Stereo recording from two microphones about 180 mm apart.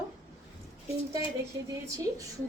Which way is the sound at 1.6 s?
15° right (ahead or behind).